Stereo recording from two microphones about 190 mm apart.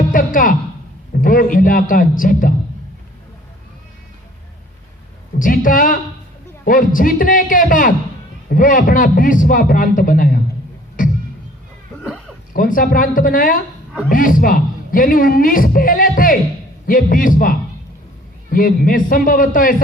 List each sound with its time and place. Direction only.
0.1 s a sound: 45° left (ahead or behind)
1.1 s a man's voice: 45° left (ahead or behind)
5.4 s a man's voice: 45° left (ahead or behind)
11.0 s music: 45° left (ahead or behind)
12.5 s a man's voice: 45° left (ahead or behind)